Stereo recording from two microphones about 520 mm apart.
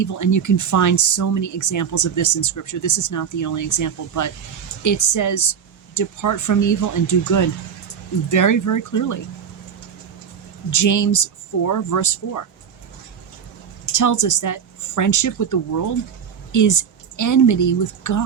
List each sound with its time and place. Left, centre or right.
0.0 s speech: left
10.7 s speech: left
13.9 s speech: left